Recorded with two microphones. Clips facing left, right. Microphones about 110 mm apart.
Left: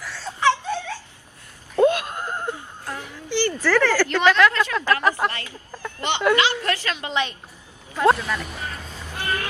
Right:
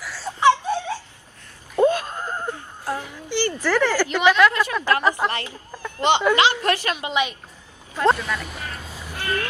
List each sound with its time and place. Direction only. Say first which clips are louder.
0.0 s laughter: right 3 dB; 10° right (ahead or behind)
1.8 s a sound: even; 15° left (ahead or behind)
2.9 s a woman's voice: right 2 dB; 15° right (ahead or behind)
8.0 s speech: left 1 dB; 5° left (ahead or behind)
9.1 s vehicle: right 1 dB; 15° left (ahead or behind)